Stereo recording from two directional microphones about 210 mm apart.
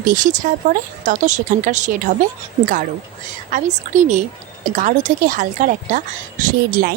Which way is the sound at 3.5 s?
35° right (ahead or behind).